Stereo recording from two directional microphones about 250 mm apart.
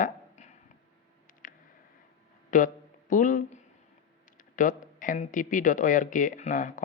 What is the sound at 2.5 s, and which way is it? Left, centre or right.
Speech, left.